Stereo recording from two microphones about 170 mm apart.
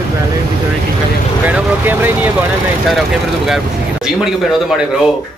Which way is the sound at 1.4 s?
10° right (ahead or behind).